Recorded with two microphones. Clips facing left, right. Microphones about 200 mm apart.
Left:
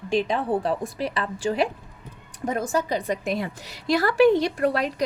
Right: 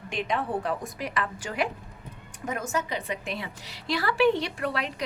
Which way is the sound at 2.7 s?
40° left (ahead or behind).